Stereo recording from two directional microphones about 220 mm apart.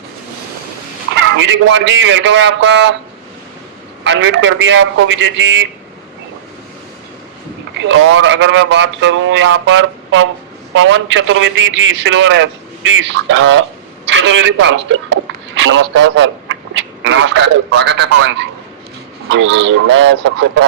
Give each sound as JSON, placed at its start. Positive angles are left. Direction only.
{"t": 1.4, "sound": "a man's voice", "side_deg": -55}
{"t": 4.0, "sound": "a man's voice", "side_deg": -55}
{"t": 7.8, "sound": "a man's voice", "side_deg": -60}